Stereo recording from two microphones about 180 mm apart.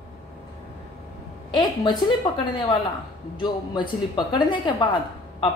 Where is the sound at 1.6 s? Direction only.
25° left (ahead or behind).